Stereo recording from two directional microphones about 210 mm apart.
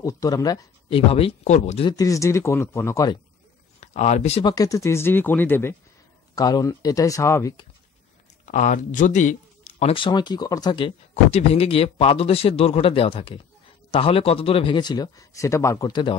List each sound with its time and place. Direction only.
0.0 s speech: 15° left (ahead or behind); by 1.9 s 35° left (ahead or behind)
1.9 s speech: 15° left (ahead or behind)
3.8 s speech: 30° left (ahead or behind); by 7.6 s 15° left (ahead or behind)
8.5 s speech: 35° left (ahead or behind); by 16.2 s 20° left (ahead or behind)